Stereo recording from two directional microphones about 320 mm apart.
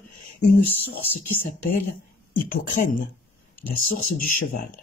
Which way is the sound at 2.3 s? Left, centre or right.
Left.